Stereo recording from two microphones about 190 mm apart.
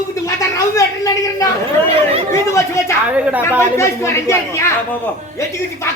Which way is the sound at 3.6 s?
15° left (ahead or behind).